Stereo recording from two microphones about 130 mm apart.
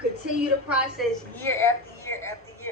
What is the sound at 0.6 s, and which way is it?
Speech, centre (ahead or behind).